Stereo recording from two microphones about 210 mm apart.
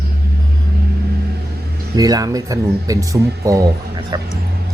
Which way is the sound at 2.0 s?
15° right (ahead or behind).